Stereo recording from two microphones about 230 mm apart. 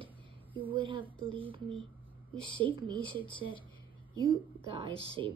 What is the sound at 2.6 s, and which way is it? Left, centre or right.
A woman's voice, centre.